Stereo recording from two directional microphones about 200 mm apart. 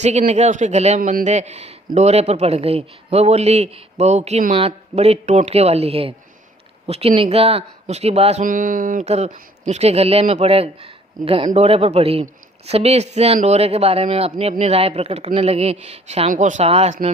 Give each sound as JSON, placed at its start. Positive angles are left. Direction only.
{"t": 0.0, "sound": "a man's voice", "side_deg": -35}